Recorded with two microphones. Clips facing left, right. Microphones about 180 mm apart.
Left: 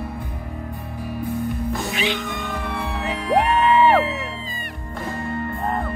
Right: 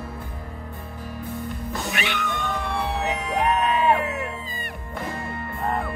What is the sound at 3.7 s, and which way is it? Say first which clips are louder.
Music: left 5 dB; 80° left.